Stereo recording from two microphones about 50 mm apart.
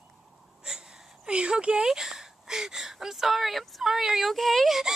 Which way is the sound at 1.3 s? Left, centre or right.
Right.